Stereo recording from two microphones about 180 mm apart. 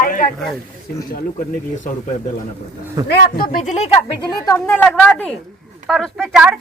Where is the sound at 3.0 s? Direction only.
60° left (ahead or behind).